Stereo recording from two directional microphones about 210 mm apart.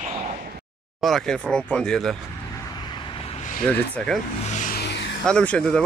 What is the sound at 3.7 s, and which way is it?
Speech, 5° left (ahead or behind).